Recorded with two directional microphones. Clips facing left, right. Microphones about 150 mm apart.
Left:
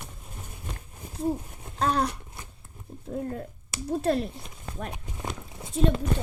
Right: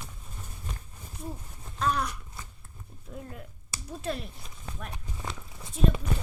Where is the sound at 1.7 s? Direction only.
35° left (ahead or behind).